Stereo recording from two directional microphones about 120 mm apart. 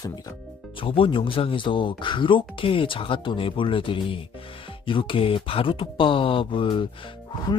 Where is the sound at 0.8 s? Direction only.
50° left (ahead or behind).